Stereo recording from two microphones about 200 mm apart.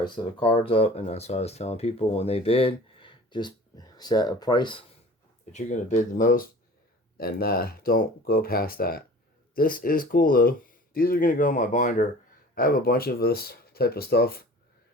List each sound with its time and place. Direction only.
0.0 s speech: 25° left (ahead or behind)
5.5 s speech: 35° left (ahead or behind)